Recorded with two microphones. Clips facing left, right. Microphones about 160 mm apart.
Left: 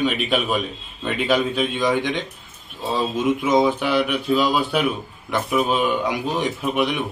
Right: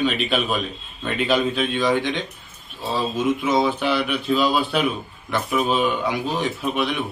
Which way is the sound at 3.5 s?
15° left (ahead or behind).